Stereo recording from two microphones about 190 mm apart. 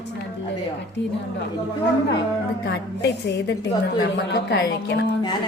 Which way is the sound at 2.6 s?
65° left (ahead or behind).